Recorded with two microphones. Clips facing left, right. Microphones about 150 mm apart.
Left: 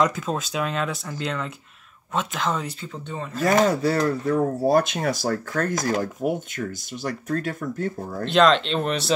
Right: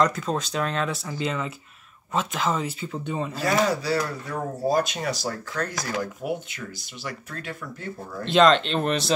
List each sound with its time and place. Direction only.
0.0 s speech: 5° left (ahead or behind); by 3.3 s 10° right (ahead or behind)
3.4 s speech: 50° left (ahead or behind)
8.3 s speech: centre (ahead or behind)